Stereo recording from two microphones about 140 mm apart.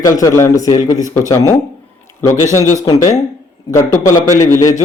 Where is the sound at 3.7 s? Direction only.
25° left (ahead or behind).